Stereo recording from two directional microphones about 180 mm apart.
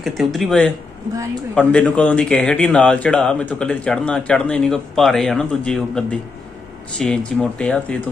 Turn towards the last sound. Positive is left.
turn(degrees=5)  # may be behind; listen again after turning